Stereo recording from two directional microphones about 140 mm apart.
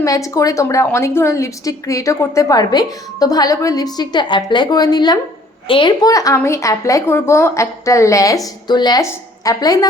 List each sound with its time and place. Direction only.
0.0 s a woman's voice: 25° left (ahead or behind)